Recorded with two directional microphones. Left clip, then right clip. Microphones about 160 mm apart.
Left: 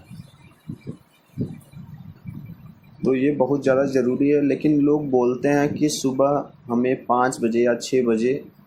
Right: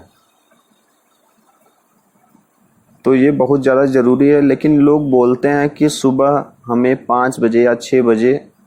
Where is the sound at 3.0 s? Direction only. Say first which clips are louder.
Right 8 dB; 45° right (ahead or behind).